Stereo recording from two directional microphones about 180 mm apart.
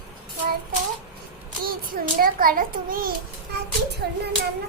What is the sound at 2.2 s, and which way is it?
Child singing, 50° right (ahead or behind).